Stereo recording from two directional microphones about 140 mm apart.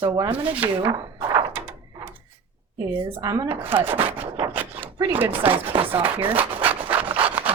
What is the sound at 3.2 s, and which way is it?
Speech, 25° right (ahead or behind).